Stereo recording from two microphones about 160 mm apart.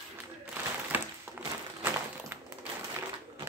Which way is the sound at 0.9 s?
10° right (ahead or behind).